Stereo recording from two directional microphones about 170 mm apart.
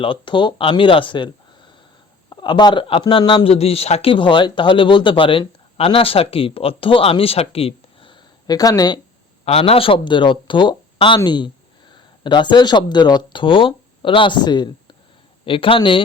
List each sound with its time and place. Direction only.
0.0 s speech: 30° left (ahead or behind)
9.4 s speech: 35° left (ahead or behind)